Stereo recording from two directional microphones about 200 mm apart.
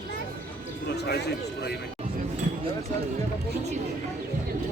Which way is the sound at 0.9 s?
55° left (ahead or behind).